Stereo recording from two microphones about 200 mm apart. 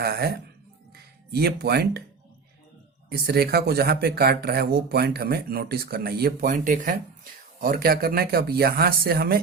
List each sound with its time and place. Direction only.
0.0 s speech: 50° right (ahead or behind)
3.1 s speech: 50° right (ahead or behind)